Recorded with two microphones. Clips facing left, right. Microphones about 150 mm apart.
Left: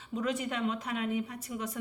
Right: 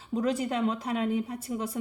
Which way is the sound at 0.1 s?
35° right (ahead or behind).